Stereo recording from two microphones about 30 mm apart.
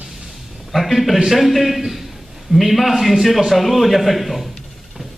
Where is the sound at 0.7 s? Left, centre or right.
Centre.